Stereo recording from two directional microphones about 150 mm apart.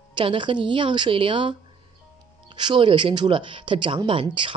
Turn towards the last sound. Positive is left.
turn(degrees=-35)  # may be behind; listen again after turning